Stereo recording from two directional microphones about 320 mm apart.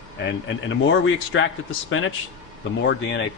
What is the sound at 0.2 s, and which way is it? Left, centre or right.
A man's voice, left.